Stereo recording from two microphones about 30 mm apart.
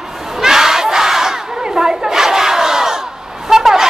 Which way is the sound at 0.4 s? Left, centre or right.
Centre.